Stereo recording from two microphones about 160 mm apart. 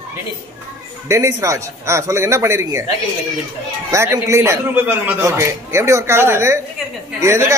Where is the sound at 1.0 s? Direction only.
20° right (ahead or behind).